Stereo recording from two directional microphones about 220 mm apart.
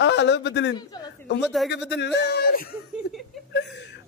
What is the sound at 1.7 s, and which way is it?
Speech, 50° left (ahead or behind).